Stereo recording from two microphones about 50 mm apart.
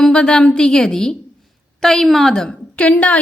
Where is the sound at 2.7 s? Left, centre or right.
Left.